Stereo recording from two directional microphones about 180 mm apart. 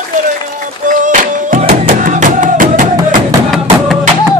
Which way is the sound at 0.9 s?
45° right (ahead or behind).